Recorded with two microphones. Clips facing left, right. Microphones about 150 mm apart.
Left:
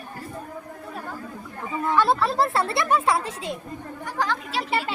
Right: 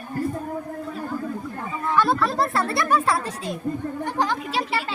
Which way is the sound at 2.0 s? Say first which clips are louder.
Even; 30° left (ahead or behind).